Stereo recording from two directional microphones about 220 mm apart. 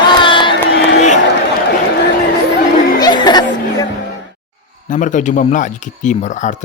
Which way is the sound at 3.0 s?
20° left (ahead or behind).